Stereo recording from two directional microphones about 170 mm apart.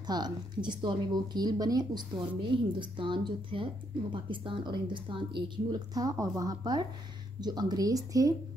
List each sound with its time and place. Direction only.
0.0 s a woman's voice: 25° right (ahead or behind)